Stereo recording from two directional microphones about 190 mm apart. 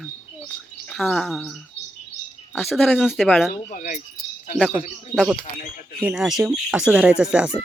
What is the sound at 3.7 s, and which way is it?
Speech, 45° left (ahead or behind).